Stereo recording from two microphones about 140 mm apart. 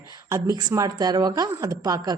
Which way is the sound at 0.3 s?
25° right (ahead or behind).